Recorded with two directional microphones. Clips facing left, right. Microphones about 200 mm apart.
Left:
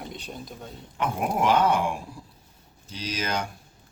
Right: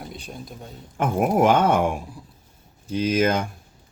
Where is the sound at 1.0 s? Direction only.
50° right (ahead or behind).